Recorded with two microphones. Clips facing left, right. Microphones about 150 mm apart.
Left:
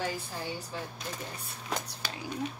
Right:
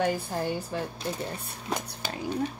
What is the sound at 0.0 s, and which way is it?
Speech, 60° right (ahead or behind).